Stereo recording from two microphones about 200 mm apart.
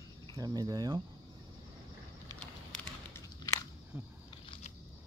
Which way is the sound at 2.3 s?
10° left (ahead or behind).